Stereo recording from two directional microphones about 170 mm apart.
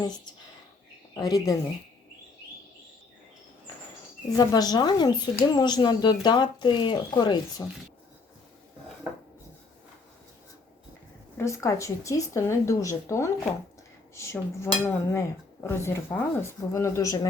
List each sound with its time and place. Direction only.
1.1 s speech: 20° left (ahead or behind)
4.4 s speech: 25° left (ahead or behind)
11.3 s speech: 15° left (ahead or behind)